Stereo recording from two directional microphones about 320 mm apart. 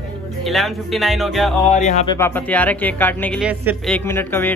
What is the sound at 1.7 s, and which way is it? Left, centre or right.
Speech, left.